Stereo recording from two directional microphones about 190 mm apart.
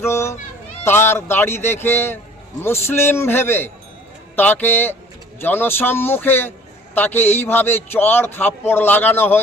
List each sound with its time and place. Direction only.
0.1 s a man's voice: 15° left (ahead or behind)